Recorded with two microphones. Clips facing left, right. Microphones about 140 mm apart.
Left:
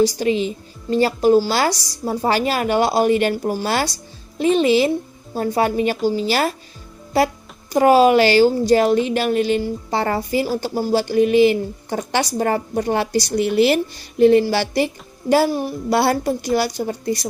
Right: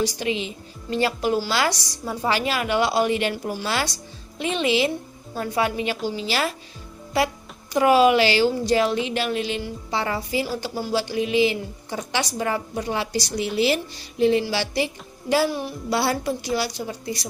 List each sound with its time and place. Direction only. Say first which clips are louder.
0.0 s a woman's voice: left 7 dB; 40° left (ahead or behind)